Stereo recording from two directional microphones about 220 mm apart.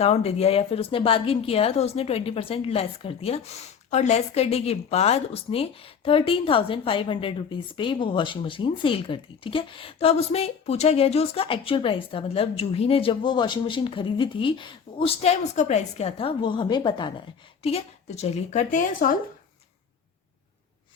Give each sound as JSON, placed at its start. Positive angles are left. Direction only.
{"t": 0.0, "sound": "a woman's voice", "side_deg": 30}